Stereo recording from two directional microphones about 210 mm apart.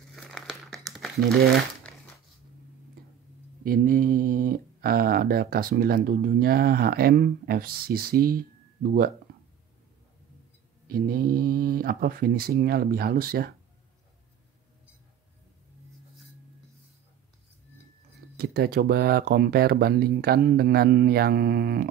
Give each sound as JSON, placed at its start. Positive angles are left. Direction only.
{"t": 0.1, "sound": "crumpling", "side_deg": 0}
{"t": 3.6, "sound": "speech", "side_deg": -40}
{"t": 10.9, "sound": "speech", "side_deg": -45}
{"t": 18.4, "sound": "speech", "side_deg": -45}